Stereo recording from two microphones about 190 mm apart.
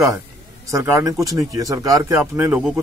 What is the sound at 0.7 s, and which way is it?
Speech, 15° right (ahead or behind).